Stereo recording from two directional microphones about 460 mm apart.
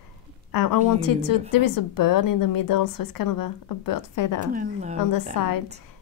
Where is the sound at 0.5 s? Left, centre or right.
Left.